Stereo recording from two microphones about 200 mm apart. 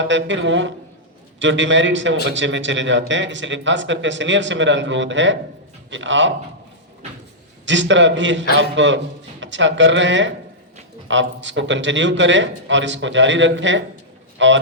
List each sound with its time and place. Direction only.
0.0 s speech: 65° right (ahead or behind)
7.6 s a man's voice: 65° right (ahead or behind)